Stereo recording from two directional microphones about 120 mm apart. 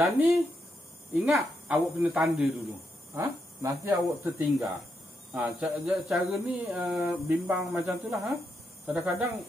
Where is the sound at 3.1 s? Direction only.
25° right (ahead or behind).